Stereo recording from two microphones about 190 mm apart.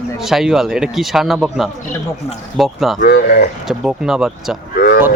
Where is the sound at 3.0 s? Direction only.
45° left (ahead or behind).